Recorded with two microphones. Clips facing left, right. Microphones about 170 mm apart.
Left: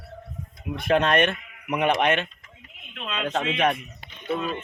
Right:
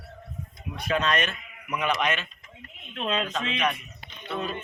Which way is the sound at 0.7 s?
55° left (ahead or behind).